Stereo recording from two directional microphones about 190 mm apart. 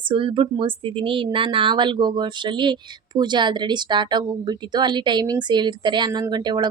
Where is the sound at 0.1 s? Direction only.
25° right (ahead or behind).